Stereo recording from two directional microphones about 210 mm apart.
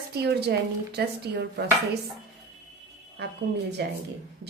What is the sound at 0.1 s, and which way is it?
Speech, 50° right (ahead or behind).